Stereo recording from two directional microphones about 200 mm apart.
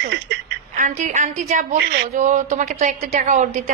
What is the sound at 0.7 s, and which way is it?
A woman's voice, 35° right (ahead or behind).